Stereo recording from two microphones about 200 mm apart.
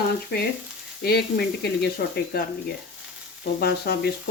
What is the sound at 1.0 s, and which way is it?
Speech, 55° left (ahead or behind).